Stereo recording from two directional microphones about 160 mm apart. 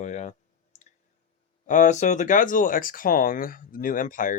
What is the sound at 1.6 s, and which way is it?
Speech, 50° left (ahead or behind).